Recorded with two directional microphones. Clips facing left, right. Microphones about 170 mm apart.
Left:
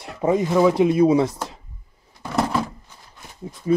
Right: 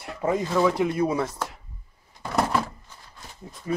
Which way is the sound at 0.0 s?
20° left (ahead or behind).